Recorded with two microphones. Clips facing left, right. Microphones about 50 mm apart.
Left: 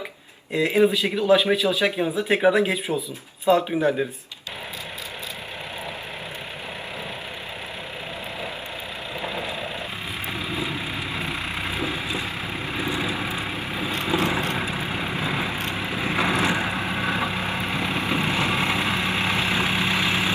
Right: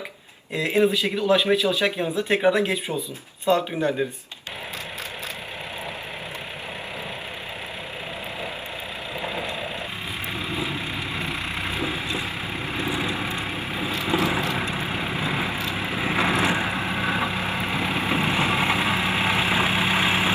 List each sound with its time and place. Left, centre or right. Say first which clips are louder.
0.5 s speech: left 2 dB; centre
9.2 s vehicle: even; centre
14.1 s vehicle: even; right
14.5 s vehicle: even; centre